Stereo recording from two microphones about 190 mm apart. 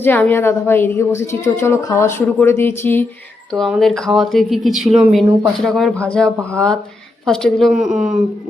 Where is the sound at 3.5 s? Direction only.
Centre (ahead or behind).